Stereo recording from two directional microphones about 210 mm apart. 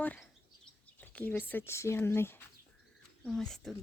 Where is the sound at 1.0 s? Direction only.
10° left (ahead or behind).